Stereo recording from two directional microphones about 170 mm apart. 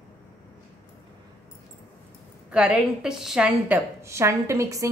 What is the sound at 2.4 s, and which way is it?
A woman's voice, 5° right (ahead or behind).